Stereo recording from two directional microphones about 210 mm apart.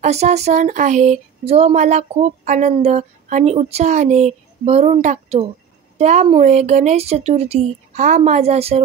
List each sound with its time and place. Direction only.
0.0 s speech: 30° right (ahead or behind)